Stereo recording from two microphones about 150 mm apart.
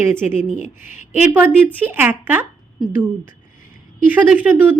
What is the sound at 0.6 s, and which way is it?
Speech, 60° left (ahead or behind).